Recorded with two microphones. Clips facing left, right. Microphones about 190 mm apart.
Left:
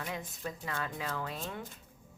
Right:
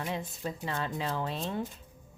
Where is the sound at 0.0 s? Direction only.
30° right (ahead or behind).